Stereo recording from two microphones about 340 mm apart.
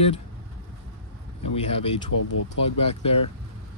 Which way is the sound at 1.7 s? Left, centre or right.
Centre.